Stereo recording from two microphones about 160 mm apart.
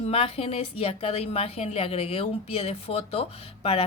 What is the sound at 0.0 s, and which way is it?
A woman's voice, 40° left (ahead or behind).